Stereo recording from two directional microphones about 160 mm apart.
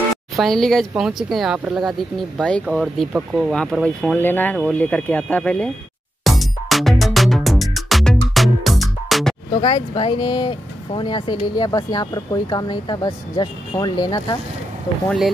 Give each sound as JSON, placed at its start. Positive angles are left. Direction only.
{"t": 0.4, "sound": "speech", "side_deg": 0}
{"t": 6.2, "sound": "music", "side_deg": 0}
{"t": 9.5, "sound": "speech", "side_deg": 30}
{"t": 15.0, "sound": "speech", "side_deg": 0}